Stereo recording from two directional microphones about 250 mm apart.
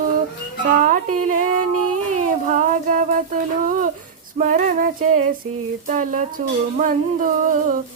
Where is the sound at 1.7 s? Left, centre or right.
Right.